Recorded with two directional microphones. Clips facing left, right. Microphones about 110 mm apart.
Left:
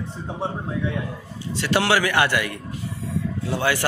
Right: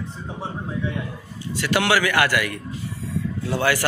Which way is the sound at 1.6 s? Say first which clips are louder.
Even; 30° left (ahead or behind).